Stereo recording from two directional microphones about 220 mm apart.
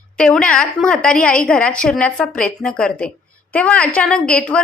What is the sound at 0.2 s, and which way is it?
A woman's voice, 5° left (ahead or behind).